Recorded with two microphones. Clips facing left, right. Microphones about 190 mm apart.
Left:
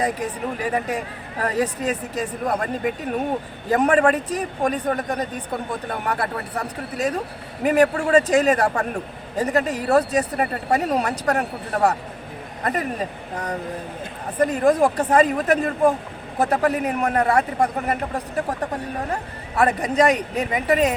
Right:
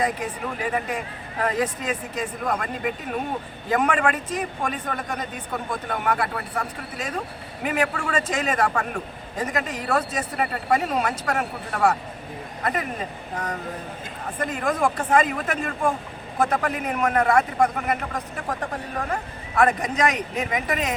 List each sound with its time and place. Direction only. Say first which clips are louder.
0.0 s a man's voice: left 2 dB; 35° left (ahead or behind)
19.5 s a man's voice: left 2 dB; 35° left (ahead or behind)